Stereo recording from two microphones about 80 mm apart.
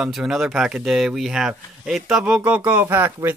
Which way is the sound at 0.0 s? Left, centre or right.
Centre.